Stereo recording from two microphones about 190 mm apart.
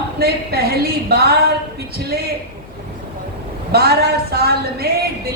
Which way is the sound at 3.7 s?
55° right (ahead or behind).